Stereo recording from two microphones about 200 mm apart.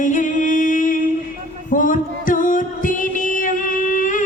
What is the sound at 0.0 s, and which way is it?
Music, 40° left (ahead or behind).